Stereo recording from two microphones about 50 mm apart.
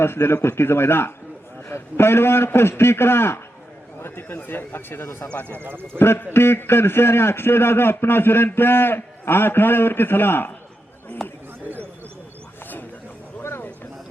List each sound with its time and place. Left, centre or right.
0.0 s a man's voice: left
5.5 s speech: right
6.0 s a man's voice: left
11.2 s speech: centre
13.4 s a sound: left